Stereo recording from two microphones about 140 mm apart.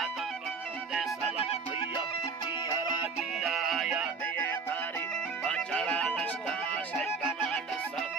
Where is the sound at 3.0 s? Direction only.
5° right (ahead or behind).